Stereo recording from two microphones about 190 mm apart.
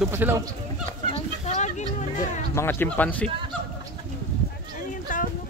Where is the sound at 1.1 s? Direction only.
35° left (ahead or behind).